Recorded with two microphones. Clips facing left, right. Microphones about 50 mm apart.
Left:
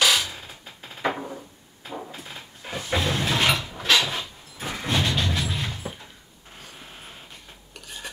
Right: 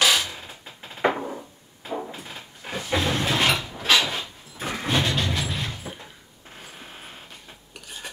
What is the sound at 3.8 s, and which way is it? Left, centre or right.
Dog, centre.